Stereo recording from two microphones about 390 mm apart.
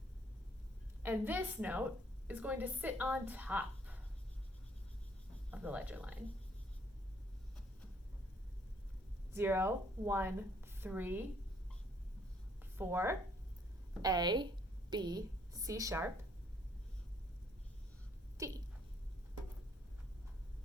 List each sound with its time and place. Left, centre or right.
1.0 s speech: centre
5.5 s speech: centre
9.3 s a woman's voice: centre
12.7 s a woman's voice: centre
18.3 s speech: centre